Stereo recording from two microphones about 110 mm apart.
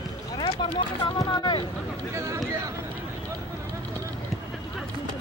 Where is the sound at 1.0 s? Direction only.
40° left (ahead or behind).